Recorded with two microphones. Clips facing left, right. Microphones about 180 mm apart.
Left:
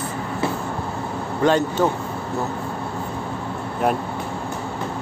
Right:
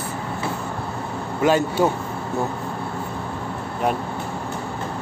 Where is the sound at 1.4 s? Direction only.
10° right (ahead or behind).